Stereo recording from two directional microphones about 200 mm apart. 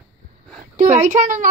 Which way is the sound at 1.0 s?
40° right (ahead or behind).